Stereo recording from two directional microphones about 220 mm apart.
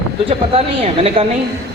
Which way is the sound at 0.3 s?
25° right (ahead or behind).